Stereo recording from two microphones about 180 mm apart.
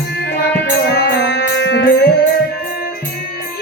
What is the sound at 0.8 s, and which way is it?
Music, 65° left (ahead or behind).